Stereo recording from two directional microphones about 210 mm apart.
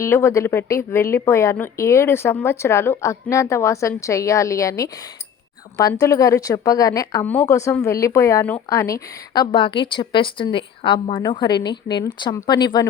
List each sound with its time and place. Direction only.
0.0 s speech: 15° left (ahead or behind)